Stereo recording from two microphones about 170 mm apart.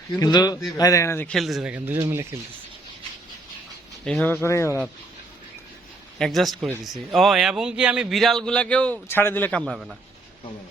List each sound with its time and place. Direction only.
0.2 s a man's voice: 25° left (ahead or behind); by 2.4 s 15° right (ahead or behind)
4.0 s speech: 5° left (ahead or behind)
6.1 s a man's voice: centre (ahead or behind)